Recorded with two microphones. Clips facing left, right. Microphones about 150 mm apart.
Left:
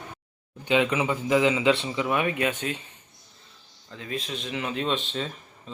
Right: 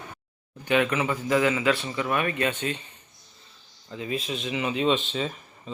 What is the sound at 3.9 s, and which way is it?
Speech, 5° right (ahead or behind).